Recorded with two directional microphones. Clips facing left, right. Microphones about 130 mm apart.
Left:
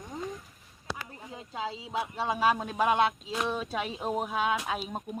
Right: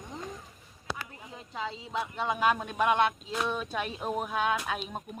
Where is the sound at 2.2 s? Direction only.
30° left (ahead or behind).